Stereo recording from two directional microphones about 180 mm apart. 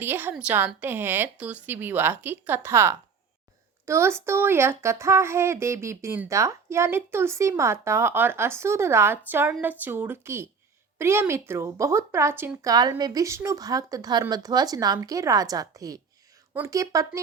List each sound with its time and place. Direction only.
0.0 s a woman's voice: 10° right (ahead or behind)